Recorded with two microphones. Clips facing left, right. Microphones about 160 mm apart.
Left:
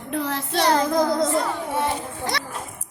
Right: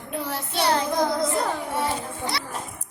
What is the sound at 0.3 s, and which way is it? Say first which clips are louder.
Child singing: left 4 dB; 90° left.